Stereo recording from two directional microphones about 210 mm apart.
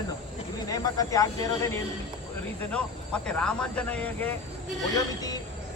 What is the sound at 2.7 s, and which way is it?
Speech, 5° left (ahead or behind).